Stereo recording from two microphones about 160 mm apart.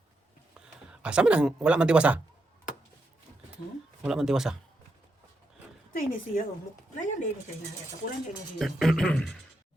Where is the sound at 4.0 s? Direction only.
5° right (ahead or behind).